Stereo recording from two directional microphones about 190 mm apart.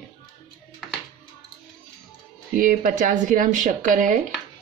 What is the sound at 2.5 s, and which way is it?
Speech, 45° right (ahead or behind).